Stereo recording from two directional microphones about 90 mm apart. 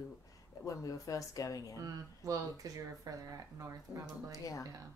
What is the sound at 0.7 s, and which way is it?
A woman's voice, 35° left (ahead or behind).